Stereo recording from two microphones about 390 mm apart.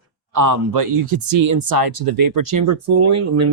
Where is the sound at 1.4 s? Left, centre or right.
Right.